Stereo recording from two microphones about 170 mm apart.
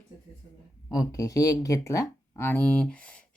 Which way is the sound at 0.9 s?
20° left (ahead or behind).